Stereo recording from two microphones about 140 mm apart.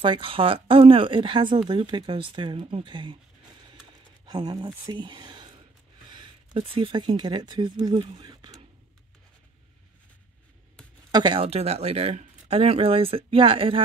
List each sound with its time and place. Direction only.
0.0 s speech: 40° right (ahead or behind)
4.3 s speech: 30° right (ahead or behind)
6.1 s a sound: 35° right (ahead or behind)
7.2 s speech: 30° right (ahead or behind)
8.2 s a sound: 30° right (ahead or behind)
11.1 s speech: 30° right (ahead or behind)